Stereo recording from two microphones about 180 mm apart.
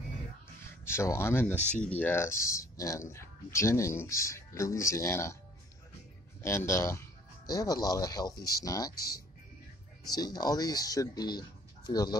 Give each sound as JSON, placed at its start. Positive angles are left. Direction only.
{"t": 0.7, "sound": "speech", "side_deg": 15}
{"t": 6.4, "sound": "speech", "side_deg": 15}
{"t": 10.0, "sound": "speech", "side_deg": 20}